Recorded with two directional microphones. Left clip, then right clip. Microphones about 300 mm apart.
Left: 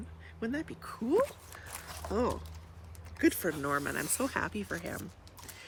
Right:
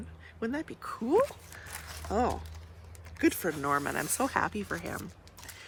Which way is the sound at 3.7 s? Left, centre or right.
Centre.